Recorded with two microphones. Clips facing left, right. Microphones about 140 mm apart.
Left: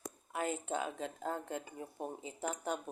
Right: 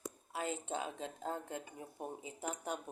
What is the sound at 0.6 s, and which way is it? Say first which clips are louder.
Speech: left 3 dB; 20° right (ahead or behind).